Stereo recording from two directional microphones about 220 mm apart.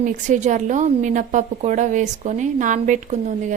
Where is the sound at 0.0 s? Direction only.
35° right (ahead or behind).